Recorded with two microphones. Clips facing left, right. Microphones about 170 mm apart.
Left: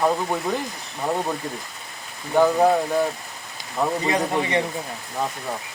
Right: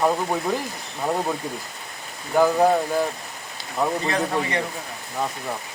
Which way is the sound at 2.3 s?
Centre (ahead or behind).